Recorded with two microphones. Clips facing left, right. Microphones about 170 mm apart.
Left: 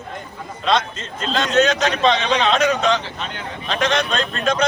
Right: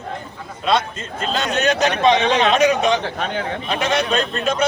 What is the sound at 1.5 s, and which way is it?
A man's voice, 10° right (ahead or behind).